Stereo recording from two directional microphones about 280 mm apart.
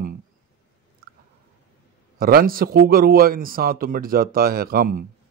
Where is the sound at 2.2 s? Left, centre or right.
Right.